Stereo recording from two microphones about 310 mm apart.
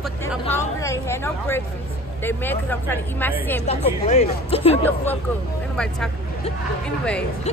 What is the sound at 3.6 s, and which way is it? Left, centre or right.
Speech, centre.